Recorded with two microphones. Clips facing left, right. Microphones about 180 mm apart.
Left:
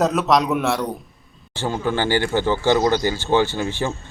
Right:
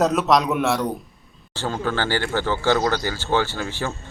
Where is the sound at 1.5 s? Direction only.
15° left (ahead or behind).